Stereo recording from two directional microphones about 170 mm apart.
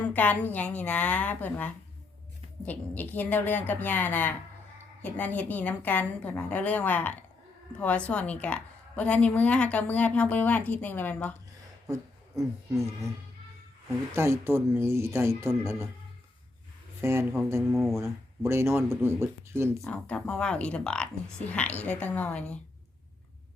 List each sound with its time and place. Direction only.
0.0 s a woman's voice: 10° left (ahead or behind)
12.4 s speech: 15° right (ahead or behind)
14.2 s speech: 15° right (ahead or behind)
17.0 s speech: 15° right (ahead or behind)
17.7 s speech: centre (ahead or behind)
17.9 s speech: 15° right (ahead or behind)
19.8 s a woman's voice: 5° left (ahead or behind)